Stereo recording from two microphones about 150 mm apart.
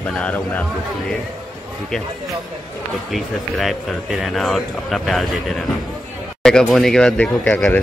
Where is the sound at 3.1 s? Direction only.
Centre (ahead or behind).